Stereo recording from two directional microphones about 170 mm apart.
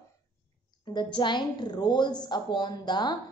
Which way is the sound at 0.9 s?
25° left (ahead or behind).